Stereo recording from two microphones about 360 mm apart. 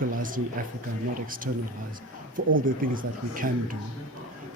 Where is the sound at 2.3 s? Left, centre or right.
Right.